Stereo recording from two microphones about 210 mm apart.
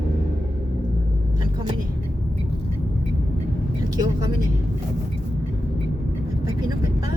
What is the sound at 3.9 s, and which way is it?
Vehicle, 20° right (ahead or behind).